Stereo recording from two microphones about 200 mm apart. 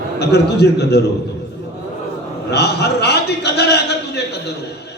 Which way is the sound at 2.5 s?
55° left (ahead or behind).